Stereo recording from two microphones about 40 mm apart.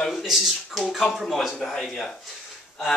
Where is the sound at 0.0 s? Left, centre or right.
Centre.